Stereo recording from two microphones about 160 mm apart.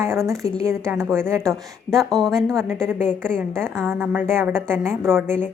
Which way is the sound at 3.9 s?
10° right (ahead or behind).